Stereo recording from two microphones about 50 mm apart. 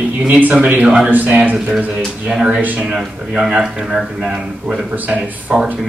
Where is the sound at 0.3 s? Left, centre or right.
Right.